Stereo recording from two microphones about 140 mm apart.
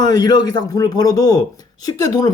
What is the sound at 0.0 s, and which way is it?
Speech, 30° left (ahead or behind).